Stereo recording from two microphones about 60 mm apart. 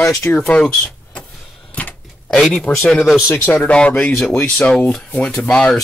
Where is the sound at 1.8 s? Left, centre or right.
Left.